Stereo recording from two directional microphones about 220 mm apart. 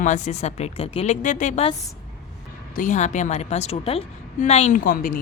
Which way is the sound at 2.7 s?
35° left (ahead or behind).